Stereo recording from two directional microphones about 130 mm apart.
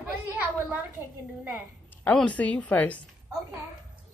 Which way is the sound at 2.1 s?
10° left (ahead or behind).